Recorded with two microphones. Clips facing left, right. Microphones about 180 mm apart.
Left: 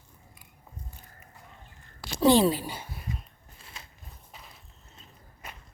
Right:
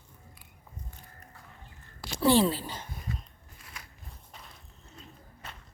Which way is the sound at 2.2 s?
15° left (ahead or behind).